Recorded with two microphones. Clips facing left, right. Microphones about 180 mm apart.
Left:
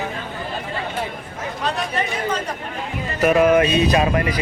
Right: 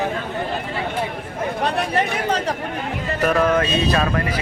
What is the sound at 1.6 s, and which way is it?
Speech, 65° right (ahead or behind).